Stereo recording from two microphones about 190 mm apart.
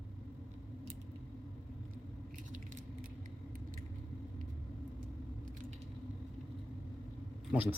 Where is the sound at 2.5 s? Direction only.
40° right (ahead or behind).